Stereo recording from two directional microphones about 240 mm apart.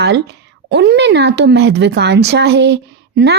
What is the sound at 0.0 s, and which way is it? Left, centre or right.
A woman's voice, right.